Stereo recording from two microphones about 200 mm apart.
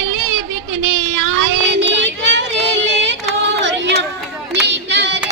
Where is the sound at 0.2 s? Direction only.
80° right; by 3.2 s 65° right (ahead or behind).